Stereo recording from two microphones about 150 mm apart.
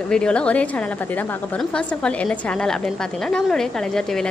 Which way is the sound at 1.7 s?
5° left (ahead or behind).